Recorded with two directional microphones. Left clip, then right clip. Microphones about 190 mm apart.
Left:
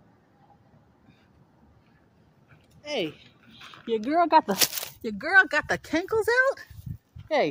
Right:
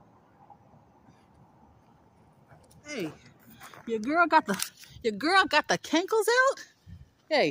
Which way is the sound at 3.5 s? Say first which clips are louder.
Left 2 dB; 30° left (ahead or behind).